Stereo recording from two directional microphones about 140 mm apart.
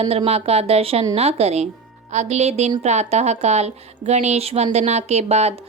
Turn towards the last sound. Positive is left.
turn(degrees=-50)  # may be behind; listen again after turning